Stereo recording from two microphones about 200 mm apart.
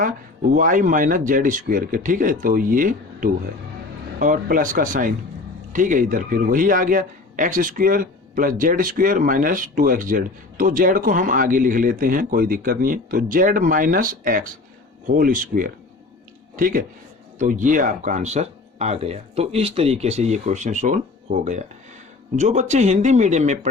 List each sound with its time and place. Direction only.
0.5 s speech: 40° right (ahead or behind)